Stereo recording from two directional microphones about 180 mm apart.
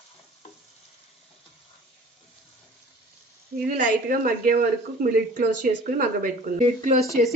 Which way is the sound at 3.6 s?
50° right (ahead or behind).